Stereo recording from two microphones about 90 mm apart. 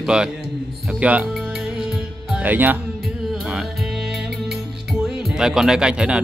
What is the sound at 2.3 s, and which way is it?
Music, 20° right (ahead or behind).